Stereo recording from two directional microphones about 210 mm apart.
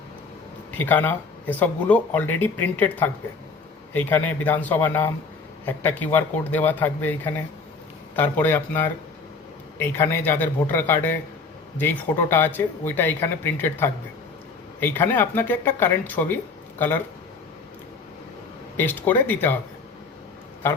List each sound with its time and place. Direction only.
0.8 s speech: 10° left (ahead or behind)
18.8 s speech: 10° left (ahead or behind)